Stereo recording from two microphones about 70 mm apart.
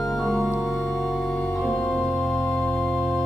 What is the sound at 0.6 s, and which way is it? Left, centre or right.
Music, centre.